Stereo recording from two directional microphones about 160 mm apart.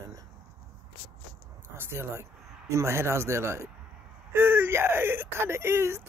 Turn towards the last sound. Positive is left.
turn(degrees=-15)  # may be behind; listen again after turning